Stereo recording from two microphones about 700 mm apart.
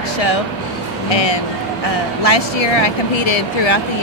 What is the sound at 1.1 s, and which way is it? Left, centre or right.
Speech, left.